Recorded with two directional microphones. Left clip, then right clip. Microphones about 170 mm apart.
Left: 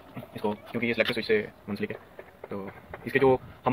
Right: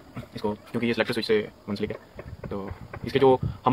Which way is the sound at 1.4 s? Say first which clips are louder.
Right 3 dB; 10° right (ahead or behind).